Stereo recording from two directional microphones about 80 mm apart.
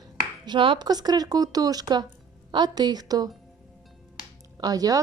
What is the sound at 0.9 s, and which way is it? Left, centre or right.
Speech, right.